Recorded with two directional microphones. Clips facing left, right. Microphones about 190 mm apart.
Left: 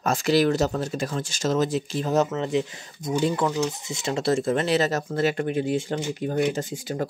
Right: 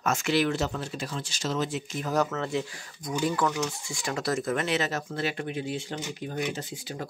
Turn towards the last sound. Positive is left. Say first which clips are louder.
# left 8 dB
turn(degrees=50)  # may be behind; listen again after turning